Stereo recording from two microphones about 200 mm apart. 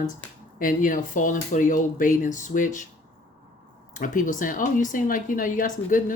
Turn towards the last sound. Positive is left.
turn(degrees=40)  # may be behind; listen again after turning